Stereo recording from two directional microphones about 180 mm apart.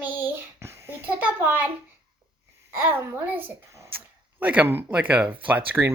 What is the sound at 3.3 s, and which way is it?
A child's voice, 10° right (ahead or behind).